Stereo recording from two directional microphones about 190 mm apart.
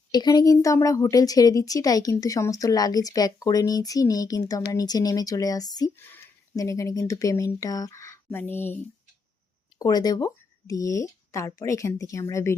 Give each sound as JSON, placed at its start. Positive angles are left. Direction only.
{"t": 0.1, "sound": "speech", "side_deg": 20}